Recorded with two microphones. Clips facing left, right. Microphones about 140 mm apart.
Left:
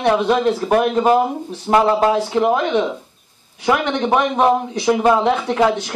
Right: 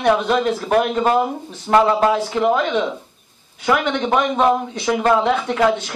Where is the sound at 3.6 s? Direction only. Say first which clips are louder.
Left 1 dB; 10° left (ahead or behind).